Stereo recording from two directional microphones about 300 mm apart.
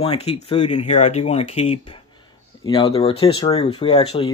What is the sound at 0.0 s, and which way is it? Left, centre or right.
Speech, centre.